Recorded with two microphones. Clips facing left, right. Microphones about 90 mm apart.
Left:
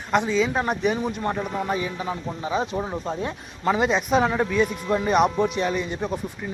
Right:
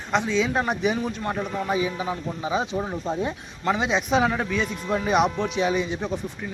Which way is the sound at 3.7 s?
Centre (ahead or behind).